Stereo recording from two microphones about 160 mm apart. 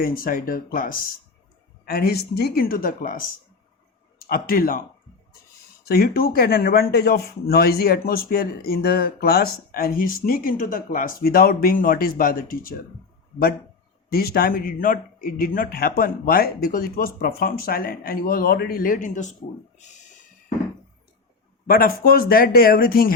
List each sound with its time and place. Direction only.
0.0 s speech: 65° left (ahead or behind)
1.8 s a man's voice: 75° left (ahead or behind)
5.8 s a man's voice: 75° left (ahead or behind)
14.1 s speech: 70° left (ahead or behind); by 19.4 s 50° left (ahead or behind)
21.7 s a man's voice: 65° left (ahead or behind)